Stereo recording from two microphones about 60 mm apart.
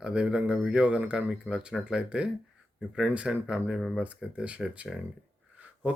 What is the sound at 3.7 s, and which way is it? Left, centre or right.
Speech, centre.